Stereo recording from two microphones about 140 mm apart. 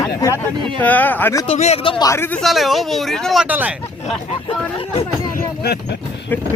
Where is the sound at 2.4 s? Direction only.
Centre (ahead or behind).